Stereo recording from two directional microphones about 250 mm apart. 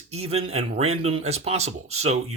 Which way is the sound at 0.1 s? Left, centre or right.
Right.